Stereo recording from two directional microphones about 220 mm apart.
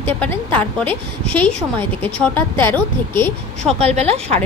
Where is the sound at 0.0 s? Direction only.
10° left (ahead or behind).